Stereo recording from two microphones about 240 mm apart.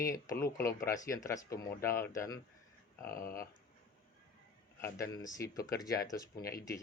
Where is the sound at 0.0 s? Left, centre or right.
Centre.